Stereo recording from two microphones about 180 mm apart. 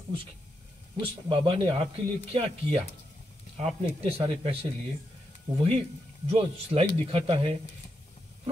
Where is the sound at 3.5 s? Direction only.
35° right (ahead or behind).